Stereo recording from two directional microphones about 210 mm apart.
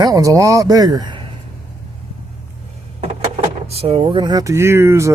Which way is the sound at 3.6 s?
30° right (ahead or behind).